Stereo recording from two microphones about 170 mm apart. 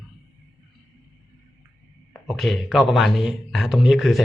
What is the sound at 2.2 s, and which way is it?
A man's voice, centre (ahead or behind).